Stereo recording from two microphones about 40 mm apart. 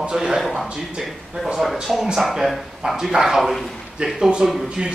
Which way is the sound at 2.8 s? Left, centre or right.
Centre.